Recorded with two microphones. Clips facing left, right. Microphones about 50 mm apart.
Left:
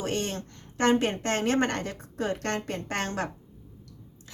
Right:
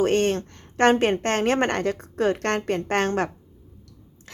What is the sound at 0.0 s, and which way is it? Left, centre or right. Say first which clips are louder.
A woman's voice: right 10 dB; right.